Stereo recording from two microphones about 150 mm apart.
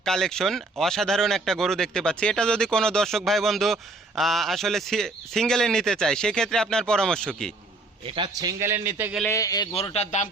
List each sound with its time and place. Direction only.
0.0 s speech: 5° left (ahead or behind)
8.0 s a man's voice: 35° right (ahead or behind); by 9.1 s 15° right (ahead or behind)
9.3 s a man's voice: 25° left (ahead or behind)
9.9 s speech: 50° left (ahead or behind)